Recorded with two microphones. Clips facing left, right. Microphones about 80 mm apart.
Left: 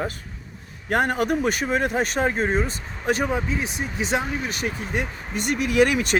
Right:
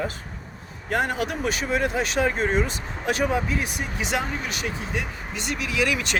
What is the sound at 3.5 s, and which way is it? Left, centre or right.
Speech, left.